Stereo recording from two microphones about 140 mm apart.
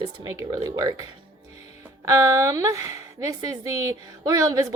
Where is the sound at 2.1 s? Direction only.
25° right (ahead or behind).